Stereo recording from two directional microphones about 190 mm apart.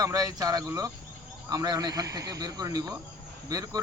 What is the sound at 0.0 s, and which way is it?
A man's voice, 20° right (ahead or behind).